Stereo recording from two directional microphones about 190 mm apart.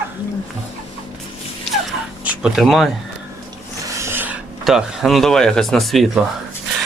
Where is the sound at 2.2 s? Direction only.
5° right (ahead or behind).